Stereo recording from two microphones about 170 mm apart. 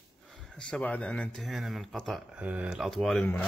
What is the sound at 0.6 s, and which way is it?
Speech, 5° left (ahead or behind).